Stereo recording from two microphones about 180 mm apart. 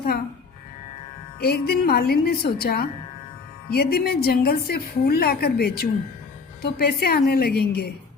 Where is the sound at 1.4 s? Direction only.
60° left (ahead or behind).